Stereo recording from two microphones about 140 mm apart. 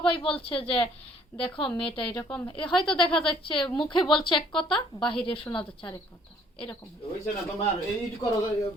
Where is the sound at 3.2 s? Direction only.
40° left (ahead or behind).